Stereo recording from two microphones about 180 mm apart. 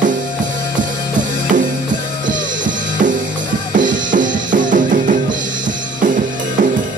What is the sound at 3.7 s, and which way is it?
Drum kit, 45° right (ahead or behind).